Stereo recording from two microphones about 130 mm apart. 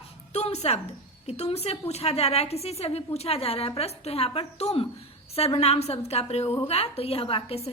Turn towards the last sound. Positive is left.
turn(degrees=45)  # may be behind; listen again after turning